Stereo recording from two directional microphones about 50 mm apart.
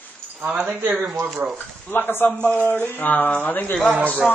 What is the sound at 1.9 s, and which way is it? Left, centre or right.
Speech, left.